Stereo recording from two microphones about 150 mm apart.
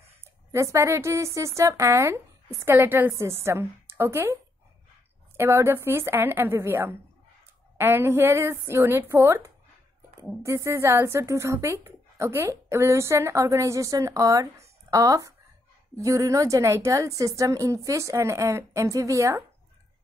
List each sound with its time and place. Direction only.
0.5 s speech: 20° right (ahead or behind)
5.4 s a woman's voice: 15° right (ahead or behind)